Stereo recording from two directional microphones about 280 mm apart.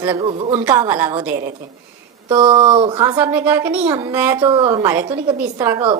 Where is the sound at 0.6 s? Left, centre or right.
Centre.